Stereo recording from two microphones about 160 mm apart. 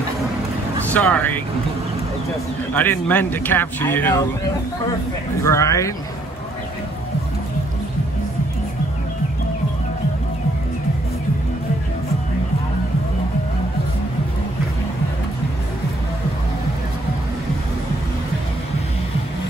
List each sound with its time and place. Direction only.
0.9 s speech: 10° left (ahead or behind)
2.7 s speech: 10° left (ahead or behind)
5.4 s speech: 20° left (ahead or behind)